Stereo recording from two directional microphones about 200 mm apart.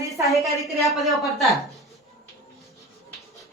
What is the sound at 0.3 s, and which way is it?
A woman's voice, centre (ahead or behind).